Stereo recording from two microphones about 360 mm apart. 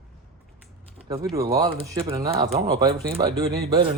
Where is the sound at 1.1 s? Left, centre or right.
Centre.